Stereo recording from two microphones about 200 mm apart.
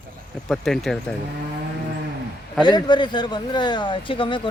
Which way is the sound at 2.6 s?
20° left (ahead or behind).